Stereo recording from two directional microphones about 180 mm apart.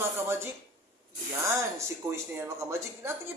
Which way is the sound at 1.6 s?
15° right (ahead or behind).